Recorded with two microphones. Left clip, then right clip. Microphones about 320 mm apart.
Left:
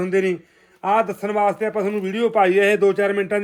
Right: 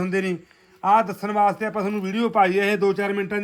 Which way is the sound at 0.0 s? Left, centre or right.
Centre.